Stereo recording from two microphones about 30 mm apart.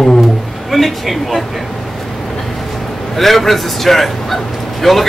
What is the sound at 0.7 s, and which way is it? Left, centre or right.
Speech, centre.